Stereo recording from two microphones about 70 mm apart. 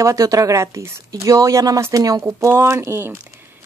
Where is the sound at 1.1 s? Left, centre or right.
Right.